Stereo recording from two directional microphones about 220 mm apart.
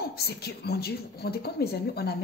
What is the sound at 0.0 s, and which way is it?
A woman's voice, 45° left (ahead or behind).